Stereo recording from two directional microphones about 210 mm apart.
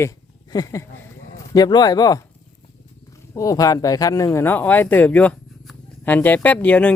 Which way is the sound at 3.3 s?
15° left (ahead or behind).